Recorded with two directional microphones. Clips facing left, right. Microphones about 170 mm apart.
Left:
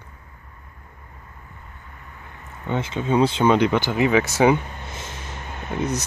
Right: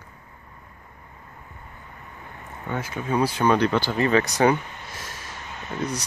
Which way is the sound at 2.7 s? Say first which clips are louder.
Left 4 dB; 25° left (ahead or behind).